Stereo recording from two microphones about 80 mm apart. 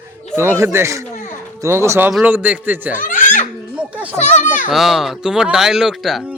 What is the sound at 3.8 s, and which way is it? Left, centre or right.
Children playing, centre.